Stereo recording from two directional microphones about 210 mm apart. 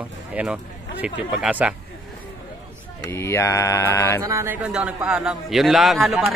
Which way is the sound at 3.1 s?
10° left (ahead or behind).